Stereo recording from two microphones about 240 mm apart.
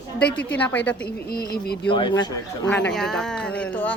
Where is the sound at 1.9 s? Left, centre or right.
Centre.